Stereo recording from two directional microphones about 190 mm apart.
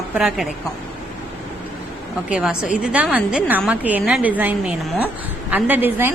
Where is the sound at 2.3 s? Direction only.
5° right (ahead or behind).